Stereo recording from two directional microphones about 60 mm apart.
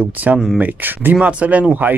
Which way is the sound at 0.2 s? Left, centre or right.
Right.